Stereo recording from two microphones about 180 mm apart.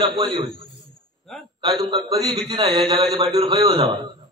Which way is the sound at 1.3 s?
Centre (ahead or behind).